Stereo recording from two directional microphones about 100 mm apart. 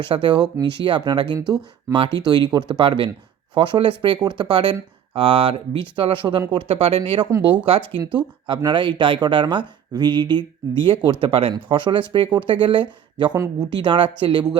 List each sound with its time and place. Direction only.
0.1 s speech: 55° right (ahead or behind)